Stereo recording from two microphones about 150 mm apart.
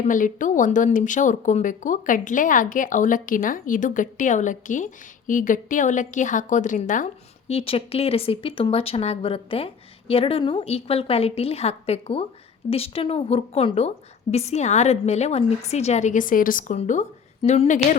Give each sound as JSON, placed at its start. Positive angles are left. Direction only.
{"t": 0.0, "sound": "speech", "side_deg": 60}
{"t": 7.5, "sound": "a woman's voice", "side_deg": 40}
{"t": 16.7, "sound": "a woman's voice", "side_deg": 50}